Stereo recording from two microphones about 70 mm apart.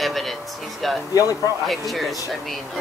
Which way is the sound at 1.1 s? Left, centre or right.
Left.